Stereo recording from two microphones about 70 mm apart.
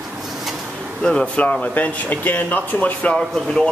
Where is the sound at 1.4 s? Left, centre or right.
Left.